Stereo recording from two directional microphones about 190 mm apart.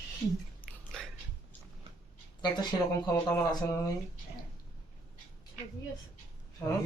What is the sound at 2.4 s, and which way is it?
Speech, 20° left (ahead or behind).